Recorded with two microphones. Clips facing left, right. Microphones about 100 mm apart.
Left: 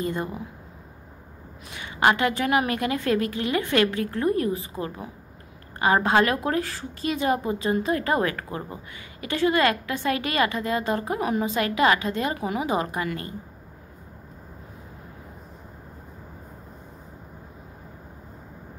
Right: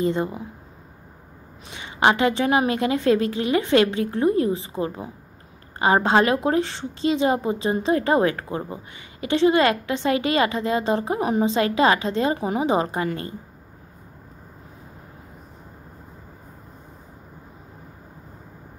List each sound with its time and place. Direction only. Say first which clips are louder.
0.0 s a woman's voice: right 5 dB; 25° right (ahead or behind)
1.7 s a woman's voice: right 2 dB; 25° right (ahead or behind)